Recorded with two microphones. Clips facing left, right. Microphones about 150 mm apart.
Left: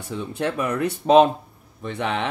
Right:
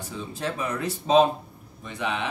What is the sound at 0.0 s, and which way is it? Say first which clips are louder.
Speech: left 5 dB; 65° left (ahead or behind).